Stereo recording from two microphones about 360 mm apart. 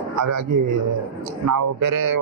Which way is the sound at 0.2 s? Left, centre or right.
Right.